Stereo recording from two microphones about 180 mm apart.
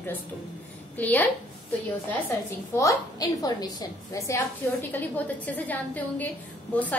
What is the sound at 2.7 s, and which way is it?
A woman's voice, 20° left (ahead or behind).